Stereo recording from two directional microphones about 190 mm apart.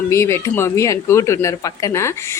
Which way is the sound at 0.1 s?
15° left (ahead or behind).